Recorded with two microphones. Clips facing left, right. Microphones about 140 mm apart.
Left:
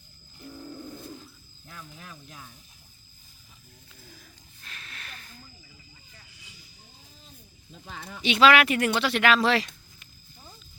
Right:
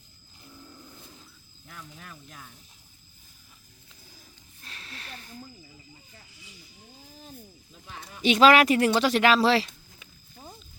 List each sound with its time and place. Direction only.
1.6 s speech: 5° left (ahead or behind)
4.6 s snake: 30° right (ahead or behind)
8.2 s speech: 40° right (ahead or behind)